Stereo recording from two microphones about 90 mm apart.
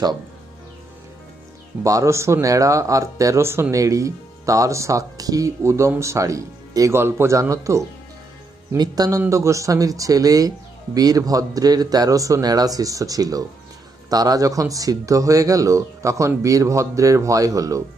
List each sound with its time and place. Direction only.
1.8 s speech: 40° right (ahead or behind)